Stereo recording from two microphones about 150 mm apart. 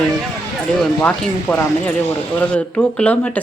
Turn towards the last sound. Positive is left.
turn(degrees=10)  # may be behind; listen again after turning